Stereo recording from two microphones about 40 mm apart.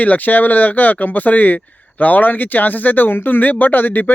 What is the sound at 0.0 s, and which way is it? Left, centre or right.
Speech, left.